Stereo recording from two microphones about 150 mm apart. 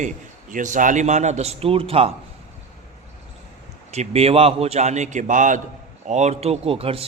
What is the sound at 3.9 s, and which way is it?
A man's voice, 45° right (ahead or behind).